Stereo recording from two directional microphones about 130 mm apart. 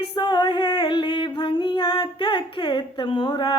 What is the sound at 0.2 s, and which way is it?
Music, 35° left (ahead or behind).